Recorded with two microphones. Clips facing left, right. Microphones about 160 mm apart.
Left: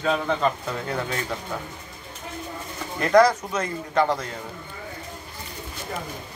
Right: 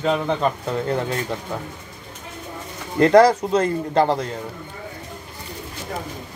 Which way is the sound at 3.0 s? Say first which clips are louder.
Right 5 dB; 30° right (ahead or behind).